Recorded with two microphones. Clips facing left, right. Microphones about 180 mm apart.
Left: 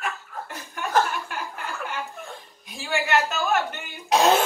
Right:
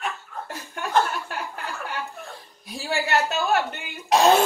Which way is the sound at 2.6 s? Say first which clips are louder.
Even; 35° right (ahead or behind).